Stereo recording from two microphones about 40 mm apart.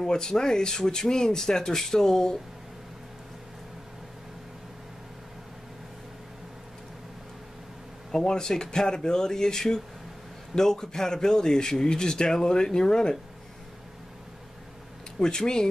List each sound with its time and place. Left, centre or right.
0.0 s a man's voice: centre
8.1 s a man's voice: centre
15.1 s a man's voice: centre